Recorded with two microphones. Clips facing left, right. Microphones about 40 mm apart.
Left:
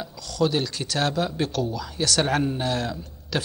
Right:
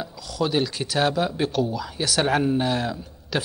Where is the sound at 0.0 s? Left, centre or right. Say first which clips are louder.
Left 2 dB; centre.